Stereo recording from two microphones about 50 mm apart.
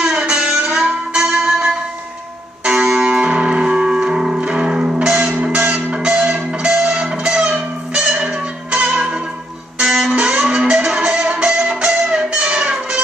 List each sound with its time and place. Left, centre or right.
0.0 s music: centre